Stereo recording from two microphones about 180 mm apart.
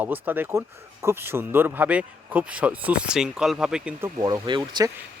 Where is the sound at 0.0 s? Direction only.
10° right (ahead or behind).